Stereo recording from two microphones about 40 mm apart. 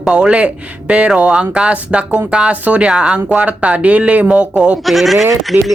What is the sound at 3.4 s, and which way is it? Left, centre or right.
Speech, right.